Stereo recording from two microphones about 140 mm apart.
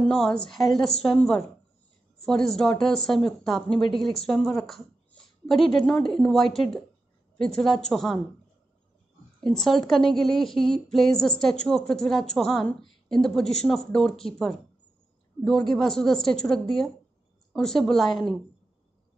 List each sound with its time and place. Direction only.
0.0 s a woman's voice: 5° left (ahead or behind)
9.4 s a woman's voice: centre (ahead or behind)